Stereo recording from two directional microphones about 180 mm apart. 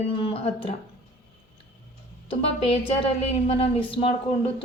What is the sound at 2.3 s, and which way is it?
Speech, 30° left (ahead or behind).